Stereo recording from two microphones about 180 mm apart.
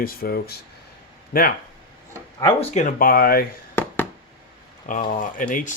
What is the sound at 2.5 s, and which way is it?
Speech, 35° left (ahead or behind).